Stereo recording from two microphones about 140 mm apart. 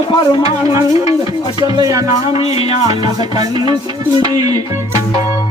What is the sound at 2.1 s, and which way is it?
Music, 45° left (ahead or behind).